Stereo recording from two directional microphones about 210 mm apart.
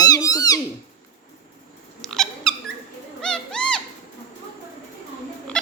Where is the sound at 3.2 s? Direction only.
5° left (ahead or behind).